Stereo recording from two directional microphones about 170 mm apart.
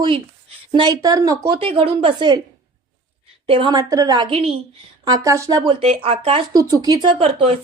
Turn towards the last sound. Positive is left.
turn(degrees=-30)  # may be behind; listen again after turning